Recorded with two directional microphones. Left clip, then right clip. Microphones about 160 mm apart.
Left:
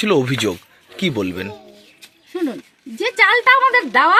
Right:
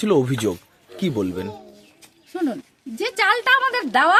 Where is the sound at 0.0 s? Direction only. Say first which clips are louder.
Left 3 dB; 10° right (ahead or behind).